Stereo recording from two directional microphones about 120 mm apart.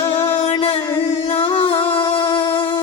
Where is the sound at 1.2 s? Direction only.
50° left (ahead or behind).